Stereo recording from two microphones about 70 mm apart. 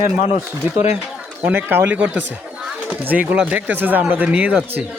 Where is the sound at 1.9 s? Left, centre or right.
Right.